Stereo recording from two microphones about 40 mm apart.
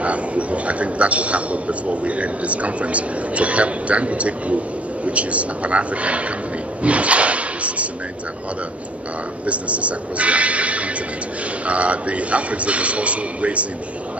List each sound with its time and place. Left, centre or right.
0.0 s a man's voice: right
6.8 s drawer open or close: right
9.5 s a man's voice: right